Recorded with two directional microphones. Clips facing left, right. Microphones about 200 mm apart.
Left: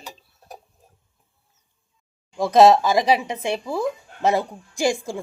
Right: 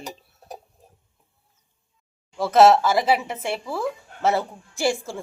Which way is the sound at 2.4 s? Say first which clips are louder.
Left 1 dB; 15° left (ahead or behind).